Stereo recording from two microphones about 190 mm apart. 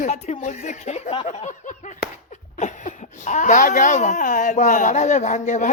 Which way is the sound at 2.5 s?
40° left (ahead or behind).